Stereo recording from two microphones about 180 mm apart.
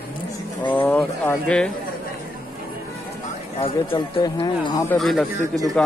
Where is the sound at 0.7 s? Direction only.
10° left (ahead or behind).